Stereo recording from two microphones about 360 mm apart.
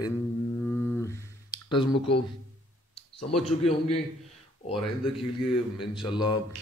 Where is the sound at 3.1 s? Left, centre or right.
Centre.